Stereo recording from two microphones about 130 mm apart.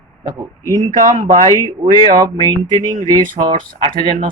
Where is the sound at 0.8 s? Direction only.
65° right (ahead or behind).